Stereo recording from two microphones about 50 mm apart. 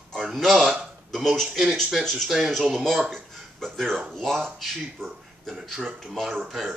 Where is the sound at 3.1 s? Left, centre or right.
Centre.